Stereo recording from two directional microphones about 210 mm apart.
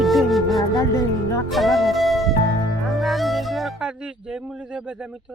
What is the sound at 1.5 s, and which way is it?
Music, centre (ahead or behind).